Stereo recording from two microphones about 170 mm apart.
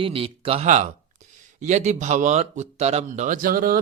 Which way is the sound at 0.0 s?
35° right (ahead or behind).